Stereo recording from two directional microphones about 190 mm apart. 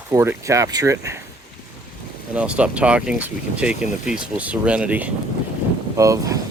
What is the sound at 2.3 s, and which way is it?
Speech, 5° right (ahead or behind).